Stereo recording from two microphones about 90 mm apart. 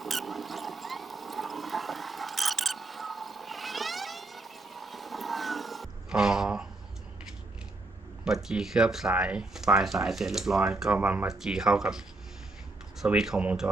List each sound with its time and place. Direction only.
0.0 s a sound: centre (ahead or behind)
8.2 s speech: 5° right (ahead or behind)
10.9 s speech: 20° right (ahead or behind)
11.3 s speech: 5° right (ahead or behind)
13.1 s speech: 5° right (ahead or behind)